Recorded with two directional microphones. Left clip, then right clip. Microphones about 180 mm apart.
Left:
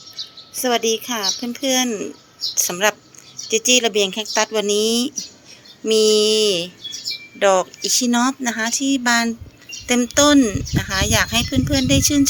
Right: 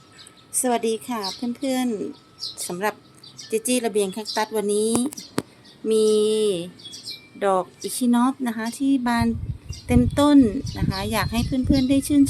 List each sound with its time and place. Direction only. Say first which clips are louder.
0.6 s a woman's voice: left 4 dB; 10° right (ahead or behind); by 6.7 s 5° left (ahead or behind)
7.3 s speech: left 6 dB; 10° right (ahead or behind)